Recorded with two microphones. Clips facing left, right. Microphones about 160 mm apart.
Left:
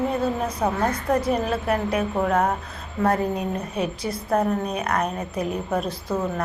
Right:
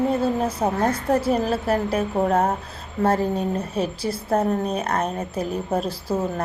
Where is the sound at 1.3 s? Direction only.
35° right (ahead or behind).